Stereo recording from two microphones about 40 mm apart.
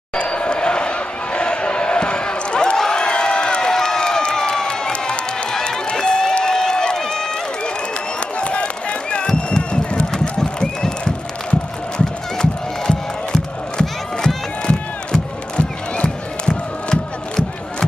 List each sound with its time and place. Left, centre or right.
0.1 s a sound: left
2.8 s crowd: centre
5.9 s run: centre
8.4 s run: left
12.4 s crowd: centre